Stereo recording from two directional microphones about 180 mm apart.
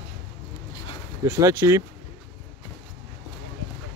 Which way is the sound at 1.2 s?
15° right (ahead or behind).